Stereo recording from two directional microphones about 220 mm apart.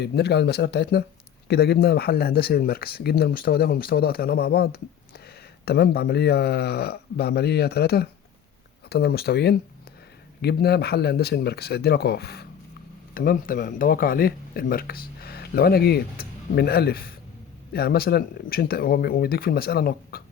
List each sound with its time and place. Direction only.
0.0 s speech: 50° left (ahead or behind)